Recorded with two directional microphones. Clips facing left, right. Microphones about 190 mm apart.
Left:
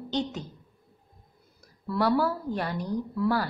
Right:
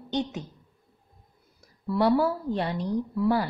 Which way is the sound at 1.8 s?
20° right (ahead or behind).